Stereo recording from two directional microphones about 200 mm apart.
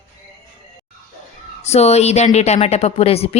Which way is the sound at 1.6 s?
30° left (ahead or behind).